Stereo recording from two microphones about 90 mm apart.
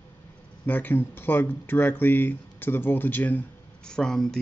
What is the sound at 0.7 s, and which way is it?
Speech, 20° left (ahead or behind).